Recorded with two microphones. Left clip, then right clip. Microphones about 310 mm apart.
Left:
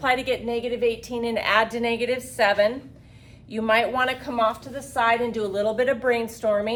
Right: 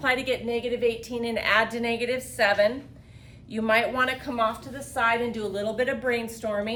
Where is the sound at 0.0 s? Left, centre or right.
Centre.